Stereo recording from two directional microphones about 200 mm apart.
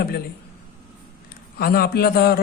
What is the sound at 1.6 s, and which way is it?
Speech, 50° left (ahead or behind).